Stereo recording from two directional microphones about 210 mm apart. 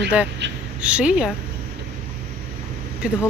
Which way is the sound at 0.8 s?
5° right (ahead or behind).